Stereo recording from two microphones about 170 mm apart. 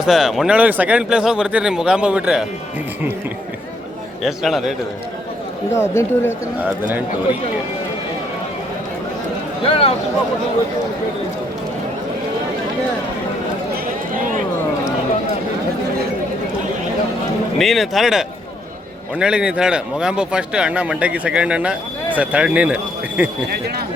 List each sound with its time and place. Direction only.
0.0 s speech: centre (ahead or behind)
4.2 s speech: centre (ahead or behind)
5.7 s speech: 15° left (ahead or behind)
6.6 s speech: 10° right (ahead or behind)
9.6 s speech: 35° left (ahead or behind)
14.1 s a sound: 55° right (ahead or behind)
17.6 s speech: centre (ahead or behind)